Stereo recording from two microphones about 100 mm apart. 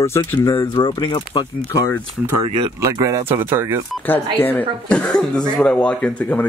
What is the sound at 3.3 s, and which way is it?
Speech, 20° right (ahead or behind).